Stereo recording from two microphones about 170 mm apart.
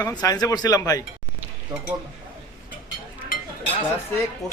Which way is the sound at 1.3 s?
10° right (ahead or behind).